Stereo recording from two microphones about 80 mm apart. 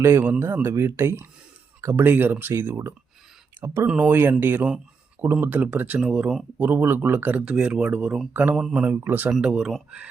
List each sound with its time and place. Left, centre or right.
0.2 s speech: right
2.0 s speech: right
3.8 s speech: centre
8.5 s speech: centre
9.0 s speech: right
9.3 s speech: centre